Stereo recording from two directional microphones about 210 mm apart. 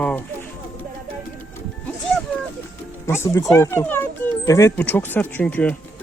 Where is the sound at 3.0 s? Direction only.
15° left (ahead or behind).